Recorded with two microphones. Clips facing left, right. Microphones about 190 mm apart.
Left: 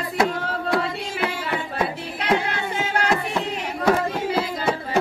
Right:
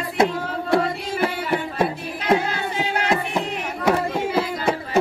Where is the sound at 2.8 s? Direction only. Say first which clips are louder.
Even; 15° right (ahead or behind).